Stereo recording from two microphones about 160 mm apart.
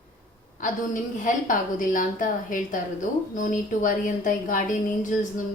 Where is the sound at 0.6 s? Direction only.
55° left (ahead or behind).